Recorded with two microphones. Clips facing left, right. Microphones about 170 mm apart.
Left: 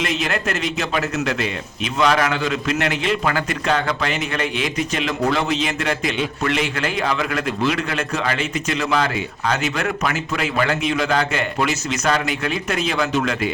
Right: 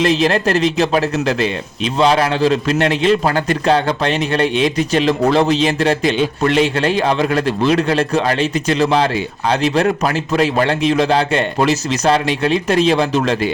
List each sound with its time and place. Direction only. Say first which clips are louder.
0.0 s a man's voice: right 8 dB; 30° right (ahead or behind)